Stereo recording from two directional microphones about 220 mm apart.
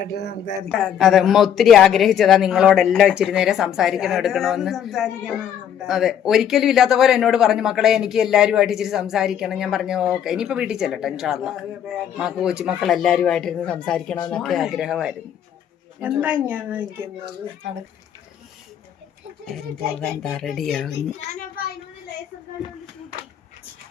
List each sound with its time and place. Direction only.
0.0 s a sound: 45° left (ahead or behind)
0.7 s speech: 5° left (ahead or behind)
20.0 s speech: 5° left (ahead or behind)
21.2 s a child's voice: 40° left (ahead or behind)